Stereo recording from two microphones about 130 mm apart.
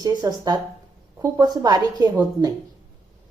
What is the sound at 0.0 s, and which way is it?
A woman's voice, 30° right (ahead or behind).